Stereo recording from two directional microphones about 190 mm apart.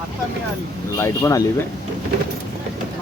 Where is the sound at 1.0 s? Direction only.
15° left (ahead or behind).